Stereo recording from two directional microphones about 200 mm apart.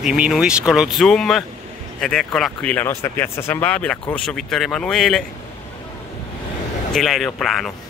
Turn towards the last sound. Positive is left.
turn(degrees=0)  # may be behind; listen again after turning